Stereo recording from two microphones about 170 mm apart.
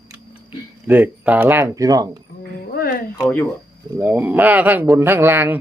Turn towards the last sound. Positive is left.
turn(degrees=-10)  # may be behind; listen again after turning